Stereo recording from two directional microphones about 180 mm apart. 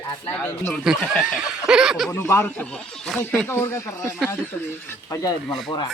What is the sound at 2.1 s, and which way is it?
Speech, 15° left (ahead or behind).